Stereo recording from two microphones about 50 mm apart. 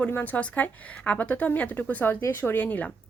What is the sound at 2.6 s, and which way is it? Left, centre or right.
Speech, left.